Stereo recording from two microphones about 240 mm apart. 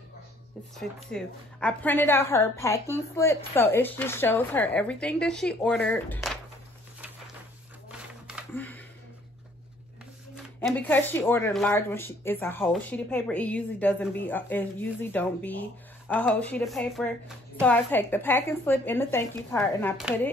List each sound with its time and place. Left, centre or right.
0.7 s speech: centre
8.5 s a sound: centre
10.3 s a woman's voice: centre